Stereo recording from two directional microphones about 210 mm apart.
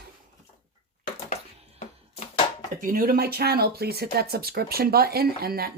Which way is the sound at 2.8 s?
45° right (ahead or behind).